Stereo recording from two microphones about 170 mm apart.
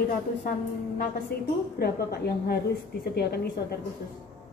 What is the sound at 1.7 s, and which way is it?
A woman's voice, 65° left (ahead or behind).